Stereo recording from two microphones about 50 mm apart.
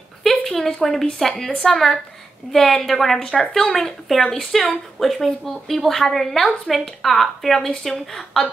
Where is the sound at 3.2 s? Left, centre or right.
Left.